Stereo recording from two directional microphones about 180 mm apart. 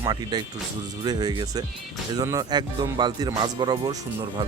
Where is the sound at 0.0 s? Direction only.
25° right (ahead or behind).